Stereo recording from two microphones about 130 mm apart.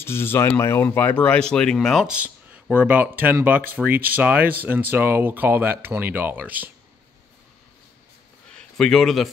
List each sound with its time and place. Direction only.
0.0 s speech: 20° left (ahead or behind); by 6.7 s 15° right (ahead or behind)
8.5 s a man's voice: 5° left (ahead or behind)